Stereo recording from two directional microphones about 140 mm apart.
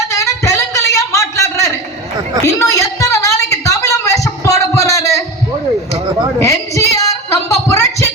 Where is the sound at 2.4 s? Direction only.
20° left (ahead or behind).